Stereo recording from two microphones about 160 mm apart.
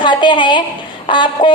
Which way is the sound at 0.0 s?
30° left (ahead or behind).